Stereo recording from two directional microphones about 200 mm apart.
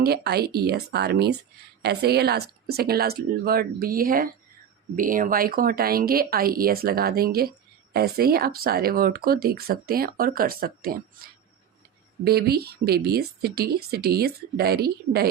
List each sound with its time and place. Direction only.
0.0 s speech: 50° right (ahead or behind)
12.2 s speech: 50° right (ahead or behind)